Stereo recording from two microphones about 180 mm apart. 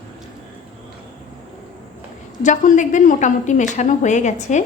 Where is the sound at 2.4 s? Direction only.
45° left (ahead or behind).